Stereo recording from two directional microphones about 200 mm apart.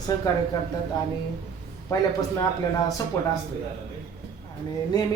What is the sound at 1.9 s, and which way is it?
Speech, 15° left (ahead or behind).